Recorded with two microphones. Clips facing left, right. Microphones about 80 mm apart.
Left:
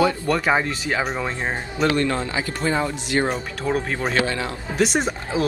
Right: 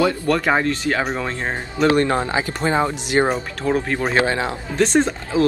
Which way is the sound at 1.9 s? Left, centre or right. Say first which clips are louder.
Right 5 dB; right.